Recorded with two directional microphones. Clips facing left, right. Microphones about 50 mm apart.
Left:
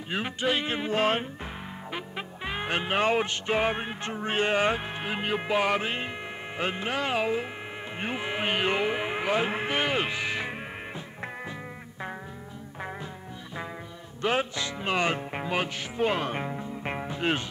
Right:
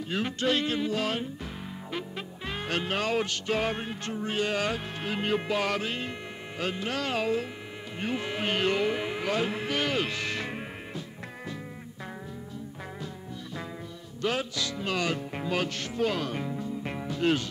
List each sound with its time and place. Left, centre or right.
0.1 s music: centre
0.7 s speech: left
1.9 s music: centre
14.2 s music: left